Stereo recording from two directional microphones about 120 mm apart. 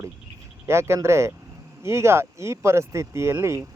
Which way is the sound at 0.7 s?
20° right (ahead or behind).